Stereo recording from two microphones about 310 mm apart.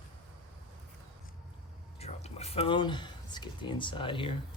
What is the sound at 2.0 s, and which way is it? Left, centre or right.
Speech, centre.